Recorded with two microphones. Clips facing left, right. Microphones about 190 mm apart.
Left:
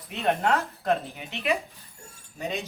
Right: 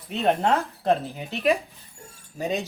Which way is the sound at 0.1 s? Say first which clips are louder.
Right 3 dB; 30° right (ahead or behind).